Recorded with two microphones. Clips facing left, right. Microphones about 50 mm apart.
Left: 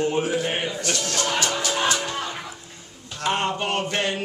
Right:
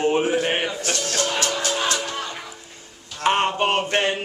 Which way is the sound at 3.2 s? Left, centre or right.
Right.